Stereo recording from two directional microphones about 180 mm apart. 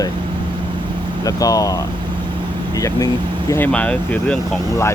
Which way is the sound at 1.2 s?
20° left (ahead or behind).